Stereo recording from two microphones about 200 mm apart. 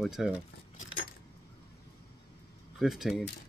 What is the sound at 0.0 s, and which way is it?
Speech, centre (ahead or behind).